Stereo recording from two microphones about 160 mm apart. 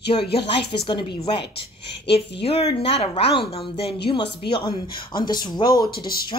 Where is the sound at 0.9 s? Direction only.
30° left (ahead or behind).